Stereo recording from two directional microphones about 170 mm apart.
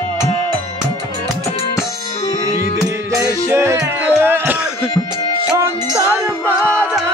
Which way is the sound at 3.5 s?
15° right (ahead or behind).